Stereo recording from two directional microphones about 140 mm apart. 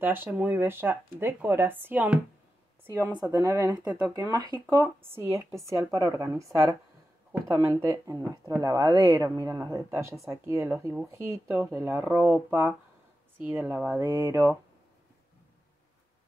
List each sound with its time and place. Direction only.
0.0 s speech: 15° right (ahead or behind)